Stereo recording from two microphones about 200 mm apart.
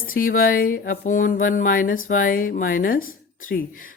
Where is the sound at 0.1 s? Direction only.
45° left (ahead or behind).